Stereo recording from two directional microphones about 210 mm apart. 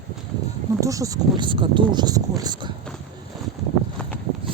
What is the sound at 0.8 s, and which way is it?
Speech, 15° right (ahead or behind).